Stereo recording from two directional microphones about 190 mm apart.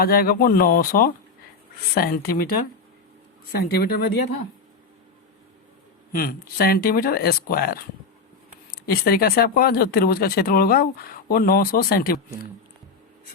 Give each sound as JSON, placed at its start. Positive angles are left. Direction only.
{"t": 0.0, "sound": "speech", "side_deg": 50}
{"t": 3.5, "sound": "speech", "side_deg": 55}
{"t": 6.1, "sound": "speech", "side_deg": 50}